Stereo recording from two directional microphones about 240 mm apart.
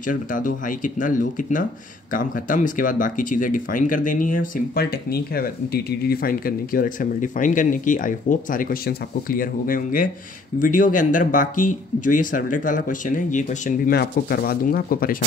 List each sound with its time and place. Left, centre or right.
0.0 s speech: left